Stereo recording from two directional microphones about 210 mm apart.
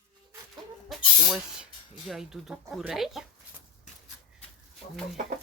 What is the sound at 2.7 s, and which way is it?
Speech, centre (ahead or behind).